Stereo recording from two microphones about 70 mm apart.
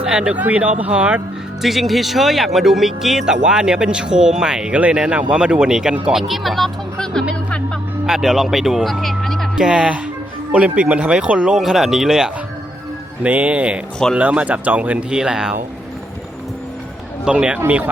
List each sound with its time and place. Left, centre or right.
0.0 s speech: centre
1.6 s speech: centre
8.0 s speech: centre
9.6 s speech: centre
13.2 s speech: centre
15.2 s speech: centre
17.2 s speech: centre